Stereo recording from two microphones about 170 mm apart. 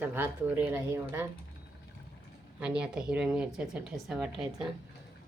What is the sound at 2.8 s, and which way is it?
A woman's voice, 5° right (ahead or behind).